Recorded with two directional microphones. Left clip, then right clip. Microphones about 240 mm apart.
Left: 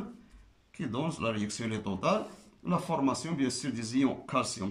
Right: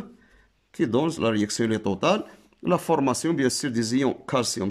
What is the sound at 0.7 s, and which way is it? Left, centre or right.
Speech, right.